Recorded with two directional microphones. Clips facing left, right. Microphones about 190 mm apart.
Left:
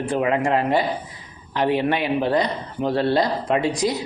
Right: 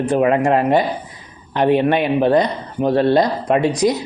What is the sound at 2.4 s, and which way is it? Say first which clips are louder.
Speech: right 5 dB; 20° right (ahead or behind).